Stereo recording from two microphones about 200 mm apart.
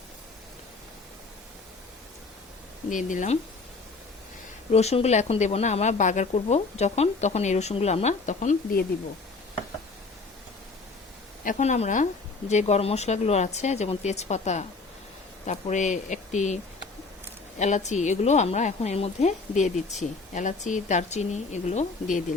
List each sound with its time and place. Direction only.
2.9 s a woman's voice: 40° left (ahead or behind)
4.7 s a woman's voice: 30° left (ahead or behind)
11.4 s a woman's voice: 40° left (ahead or behind)
17.6 s a woman's voice: 35° left (ahead or behind)